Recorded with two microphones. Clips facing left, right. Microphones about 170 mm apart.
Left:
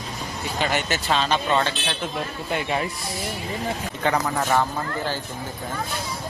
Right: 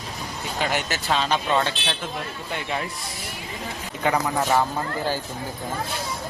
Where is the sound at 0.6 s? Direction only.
5° right (ahead or behind).